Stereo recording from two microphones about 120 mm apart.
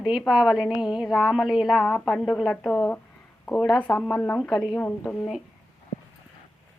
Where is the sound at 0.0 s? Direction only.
5° right (ahead or behind).